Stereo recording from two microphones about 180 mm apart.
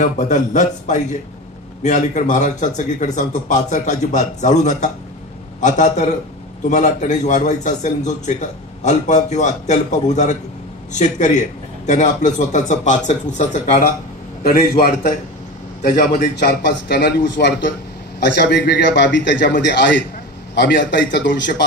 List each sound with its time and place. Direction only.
0.0 s a man's voice: 40° left (ahead or behind)
14.4 s a man's voice: 55° left (ahead or behind)
16.3 s a man's voice: 70° left (ahead or behind)